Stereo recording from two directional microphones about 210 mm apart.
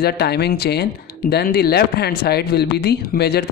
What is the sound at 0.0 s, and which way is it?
Speech, 50° left (ahead or behind).